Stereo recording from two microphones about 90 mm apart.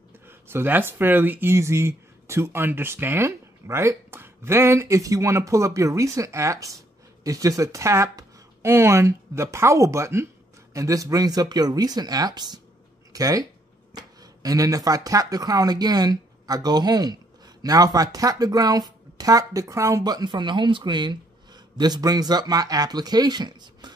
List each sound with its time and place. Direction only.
0.3 s speech: 25° right (ahead or behind)
20.0 s speech: 50° right (ahead or behind)